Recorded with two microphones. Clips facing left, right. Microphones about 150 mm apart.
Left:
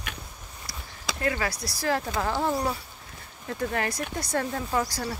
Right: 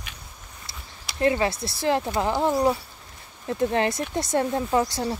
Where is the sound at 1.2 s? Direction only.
25° right (ahead or behind).